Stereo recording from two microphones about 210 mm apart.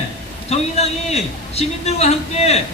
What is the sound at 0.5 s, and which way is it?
A man's voice, 30° left (ahead or behind).